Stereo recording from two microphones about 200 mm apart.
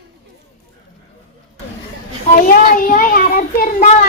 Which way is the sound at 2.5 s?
45° left (ahead or behind).